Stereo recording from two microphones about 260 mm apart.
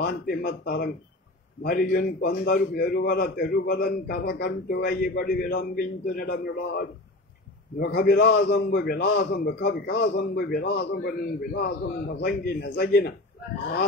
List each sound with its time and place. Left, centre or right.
0.0 s a man's voice: left